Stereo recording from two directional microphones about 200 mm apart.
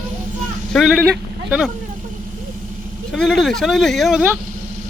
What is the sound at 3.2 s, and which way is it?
Speech, centre (ahead or behind).